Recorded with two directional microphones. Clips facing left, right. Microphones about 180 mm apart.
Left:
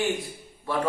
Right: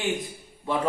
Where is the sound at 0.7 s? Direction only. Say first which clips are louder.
Right 1 dB; 20° right (ahead or behind).